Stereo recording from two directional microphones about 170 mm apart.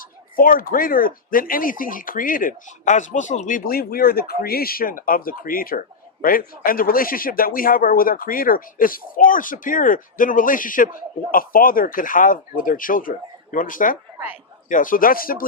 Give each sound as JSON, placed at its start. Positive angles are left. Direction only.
{"t": 0.3, "sound": "speech", "side_deg": 55}